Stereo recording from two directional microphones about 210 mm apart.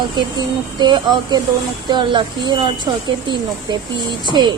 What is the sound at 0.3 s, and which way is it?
Speech, 20° right (ahead or behind).